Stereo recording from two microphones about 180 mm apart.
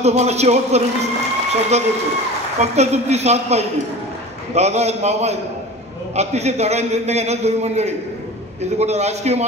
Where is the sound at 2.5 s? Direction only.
35° right (ahead or behind).